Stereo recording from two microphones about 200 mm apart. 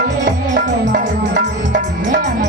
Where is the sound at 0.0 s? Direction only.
45° right (ahead or behind).